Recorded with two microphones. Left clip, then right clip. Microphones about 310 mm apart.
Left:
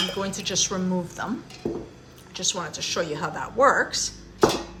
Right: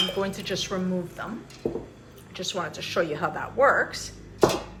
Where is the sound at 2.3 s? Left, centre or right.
Centre.